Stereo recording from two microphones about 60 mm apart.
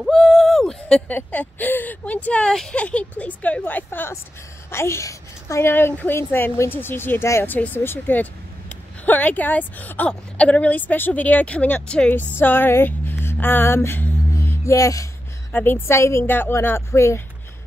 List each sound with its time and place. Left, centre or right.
0.1 s a sound: centre
1.0 s speech: left
4.6 s a woman's voice: left
5.7 s speech: left
12.1 s speech: left
14.6 s speech: left
15.5 s a woman's voice: left
16.3 s speech: left
16.6 s a woman's voice: left